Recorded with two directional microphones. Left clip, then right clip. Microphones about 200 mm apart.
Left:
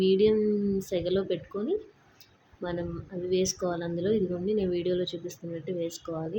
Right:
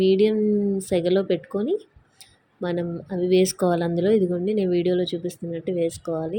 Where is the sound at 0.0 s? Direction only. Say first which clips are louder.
Right 4 dB; 25° right (ahead or behind).